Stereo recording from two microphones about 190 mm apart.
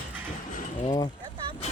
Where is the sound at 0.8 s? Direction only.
25° left (ahead or behind).